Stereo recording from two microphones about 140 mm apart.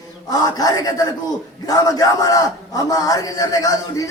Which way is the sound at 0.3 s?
25° left (ahead or behind).